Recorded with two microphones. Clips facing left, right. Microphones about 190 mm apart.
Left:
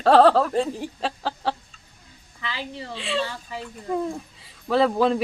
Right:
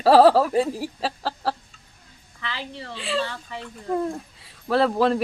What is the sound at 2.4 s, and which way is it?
Speech, 20° left (ahead or behind).